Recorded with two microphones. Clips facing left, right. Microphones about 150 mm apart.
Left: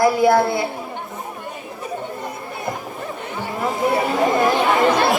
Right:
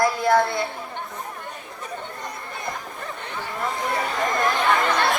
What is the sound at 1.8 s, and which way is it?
Chatter, 10° left (ahead or behind).